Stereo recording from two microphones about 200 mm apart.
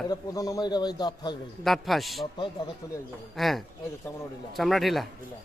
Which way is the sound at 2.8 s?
15° left (ahead or behind).